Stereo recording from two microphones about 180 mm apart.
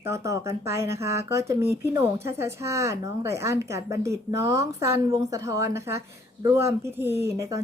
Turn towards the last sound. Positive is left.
turn(degrees=-15)  # may be behind; listen again after turning